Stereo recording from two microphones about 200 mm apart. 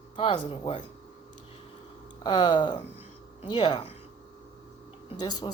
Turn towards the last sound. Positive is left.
turn(degrees=20)  # may be behind; listen again after turning